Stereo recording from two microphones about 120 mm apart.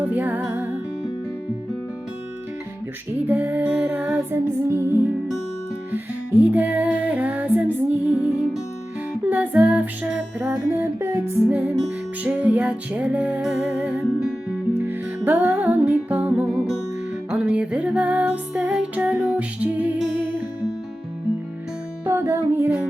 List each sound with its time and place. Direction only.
0.0 s music: 15° right (ahead or behind)
3.2 s music: 15° right (ahead or behind)
10.5 s music: 25° right (ahead or behind)
22.0 s music: 20° right (ahead or behind)